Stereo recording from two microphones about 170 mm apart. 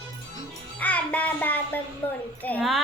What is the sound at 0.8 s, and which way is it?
Child singing, 10° left (ahead or behind).